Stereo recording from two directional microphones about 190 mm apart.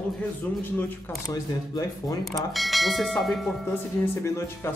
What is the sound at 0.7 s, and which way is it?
Speech, 15° left (ahead or behind).